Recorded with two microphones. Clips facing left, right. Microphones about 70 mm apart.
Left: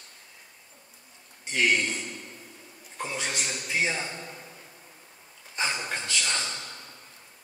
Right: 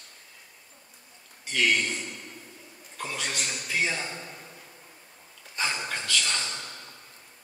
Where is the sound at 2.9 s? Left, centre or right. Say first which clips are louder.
Left 1 dB; centre.